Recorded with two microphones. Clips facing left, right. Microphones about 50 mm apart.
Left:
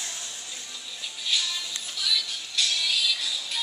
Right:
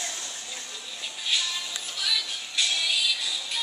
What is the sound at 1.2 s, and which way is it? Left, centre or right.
Music, centre.